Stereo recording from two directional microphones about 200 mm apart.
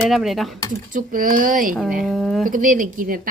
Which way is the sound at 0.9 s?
45° right (ahead or behind).